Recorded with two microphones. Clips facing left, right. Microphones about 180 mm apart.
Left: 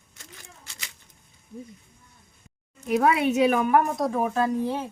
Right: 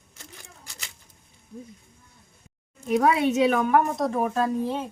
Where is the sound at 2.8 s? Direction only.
5° left (ahead or behind).